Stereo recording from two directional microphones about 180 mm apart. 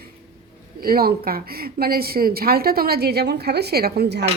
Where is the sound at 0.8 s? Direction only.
55° right (ahead or behind).